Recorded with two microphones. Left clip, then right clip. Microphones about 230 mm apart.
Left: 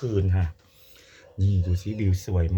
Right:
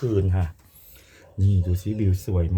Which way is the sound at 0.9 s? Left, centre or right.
Centre.